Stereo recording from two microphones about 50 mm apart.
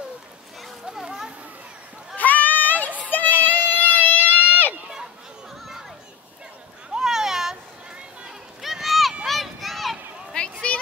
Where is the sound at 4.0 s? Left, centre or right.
Left.